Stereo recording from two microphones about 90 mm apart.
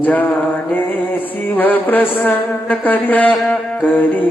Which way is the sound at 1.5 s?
20° left (ahead or behind).